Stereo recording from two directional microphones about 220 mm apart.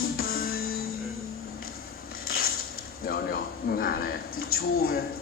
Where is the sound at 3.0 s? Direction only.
40° left (ahead or behind).